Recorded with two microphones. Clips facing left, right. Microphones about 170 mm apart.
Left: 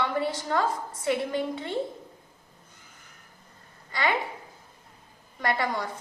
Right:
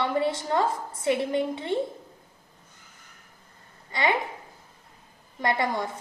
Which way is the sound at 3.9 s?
20° right (ahead or behind).